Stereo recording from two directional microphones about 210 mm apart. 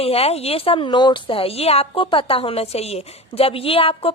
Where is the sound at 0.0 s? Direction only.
30° left (ahead or behind).